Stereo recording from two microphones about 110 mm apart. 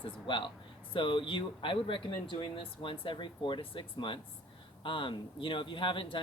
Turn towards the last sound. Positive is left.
turn(degrees=50)  # may be behind; listen again after turning